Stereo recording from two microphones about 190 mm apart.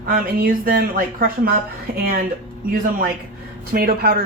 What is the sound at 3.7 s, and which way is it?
Speech, 50° right (ahead or behind).